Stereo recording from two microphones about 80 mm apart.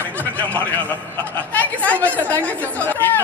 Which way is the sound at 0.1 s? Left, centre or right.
Centre.